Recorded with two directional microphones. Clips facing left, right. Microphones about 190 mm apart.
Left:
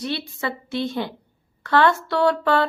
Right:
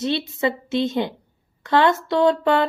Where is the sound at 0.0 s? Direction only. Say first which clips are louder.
Right 5 dB; 20° right (ahead or behind).